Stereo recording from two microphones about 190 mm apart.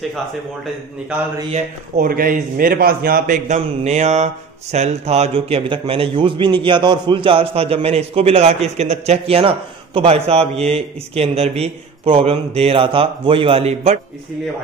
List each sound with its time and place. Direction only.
1.5 s a man's voice: 50° right (ahead or behind); by 13.9 s 30° right (ahead or behind)